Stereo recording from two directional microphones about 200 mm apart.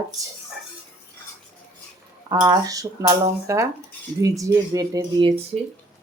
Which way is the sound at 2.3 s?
20° right (ahead or behind).